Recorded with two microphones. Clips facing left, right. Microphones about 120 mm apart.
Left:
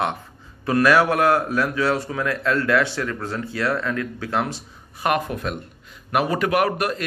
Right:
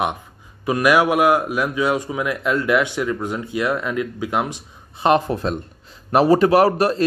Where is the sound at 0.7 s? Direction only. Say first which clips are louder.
Right 1 dB; 15° right (ahead or behind).